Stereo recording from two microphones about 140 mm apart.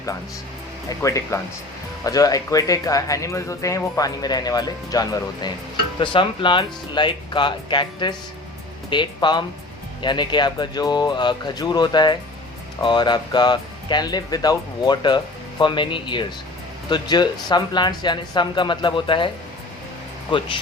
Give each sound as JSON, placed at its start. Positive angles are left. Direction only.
{"t": 0.9, "sound": "speech", "side_deg": 20}
{"t": 20.3, "sound": "speech", "side_deg": 35}